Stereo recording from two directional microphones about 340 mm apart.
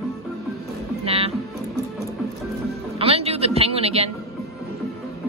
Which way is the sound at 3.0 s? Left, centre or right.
Centre.